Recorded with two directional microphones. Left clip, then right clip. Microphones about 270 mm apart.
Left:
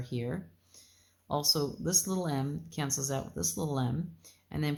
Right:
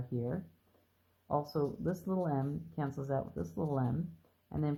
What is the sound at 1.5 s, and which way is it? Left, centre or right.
Speech, left.